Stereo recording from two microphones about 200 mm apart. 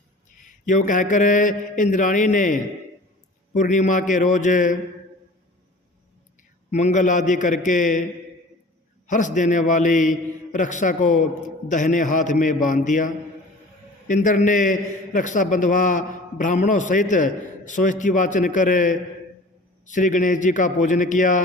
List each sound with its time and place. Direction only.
0.6 s a man's voice: 40° left (ahead or behind)
6.7 s a man's voice: 35° left (ahead or behind)
9.0 s a man's voice: 40° left (ahead or behind)
14.1 s a man's voice: 40° left (ahead or behind)